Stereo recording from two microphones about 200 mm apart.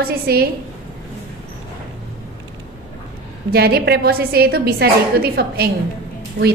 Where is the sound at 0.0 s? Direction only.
50° right (ahead or behind).